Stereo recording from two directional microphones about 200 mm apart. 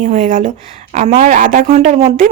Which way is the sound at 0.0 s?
40° right (ahead or behind).